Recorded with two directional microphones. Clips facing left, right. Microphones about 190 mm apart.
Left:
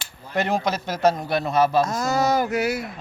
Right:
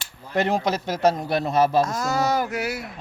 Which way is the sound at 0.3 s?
30° right (ahead or behind).